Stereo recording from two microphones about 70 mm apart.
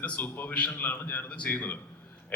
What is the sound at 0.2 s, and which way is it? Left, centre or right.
Speech, left.